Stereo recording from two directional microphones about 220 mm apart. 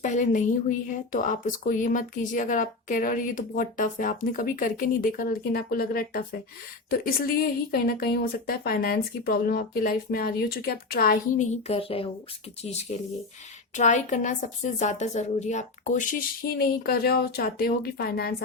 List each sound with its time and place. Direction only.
0.0 s a woman's voice: 35° left (ahead or behind)